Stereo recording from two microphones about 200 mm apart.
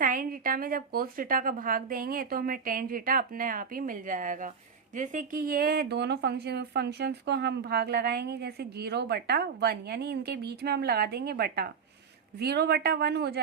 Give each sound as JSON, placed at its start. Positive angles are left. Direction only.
{"t": 0.0, "sound": "speech", "side_deg": -45}